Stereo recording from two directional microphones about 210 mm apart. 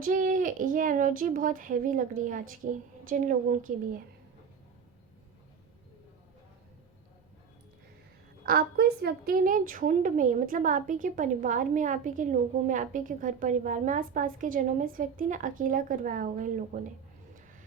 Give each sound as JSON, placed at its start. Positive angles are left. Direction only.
{"t": 0.0, "sound": "a woman's voice", "side_deg": -40}
{"t": 8.4, "sound": "a woman's voice", "side_deg": -45}